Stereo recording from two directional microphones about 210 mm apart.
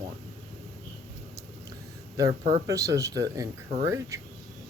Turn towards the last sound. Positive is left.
turn(degrees=-15)  # may be behind; listen again after turning